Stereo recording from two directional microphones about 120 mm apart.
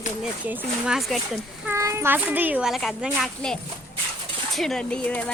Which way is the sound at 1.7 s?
25° right (ahead or behind).